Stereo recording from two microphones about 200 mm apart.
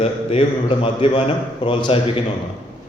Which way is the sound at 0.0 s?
30° left (ahead or behind).